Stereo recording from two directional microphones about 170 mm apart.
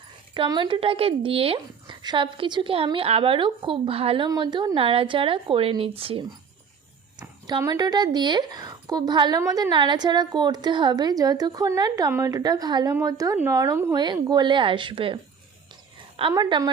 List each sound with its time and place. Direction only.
0.3 s a woman's voice: 30° right (ahead or behind)
15.7 s a sound: 30° right (ahead or behind)
16.3 s a woman's voice: 25° right (ahead or behind)